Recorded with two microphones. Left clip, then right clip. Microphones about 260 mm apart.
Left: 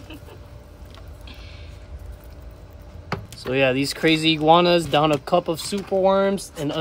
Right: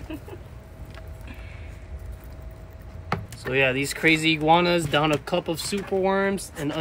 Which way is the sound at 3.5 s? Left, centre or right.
Left.